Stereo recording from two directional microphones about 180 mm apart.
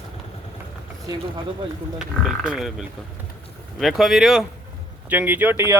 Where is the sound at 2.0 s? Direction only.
5° right (ahead or behind).